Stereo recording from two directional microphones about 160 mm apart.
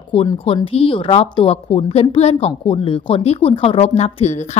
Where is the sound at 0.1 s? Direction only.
35° left (ahead or behind).